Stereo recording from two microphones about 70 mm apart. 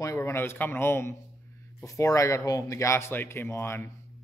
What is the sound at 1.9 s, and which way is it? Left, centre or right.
Speech, left.